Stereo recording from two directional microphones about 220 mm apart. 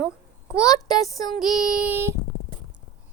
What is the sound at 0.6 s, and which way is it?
A child's voice, 15° left (ahead or behind).